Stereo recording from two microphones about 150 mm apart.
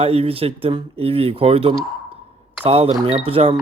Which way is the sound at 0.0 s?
40° right (ahead or behind).